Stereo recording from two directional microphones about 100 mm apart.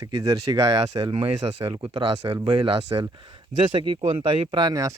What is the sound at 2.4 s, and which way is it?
Speech, 60° right (ahead or behind).